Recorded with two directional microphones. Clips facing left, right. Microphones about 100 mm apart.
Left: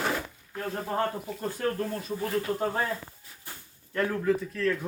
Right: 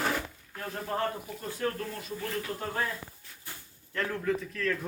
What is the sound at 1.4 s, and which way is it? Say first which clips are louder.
Speech: left 4 dB; 40° left (ahead or behind).